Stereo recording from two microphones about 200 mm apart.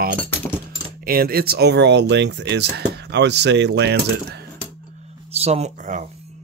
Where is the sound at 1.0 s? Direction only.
50° right (ahead or behind).